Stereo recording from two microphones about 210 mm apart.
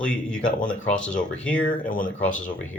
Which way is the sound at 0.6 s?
40° left (ahead or behind).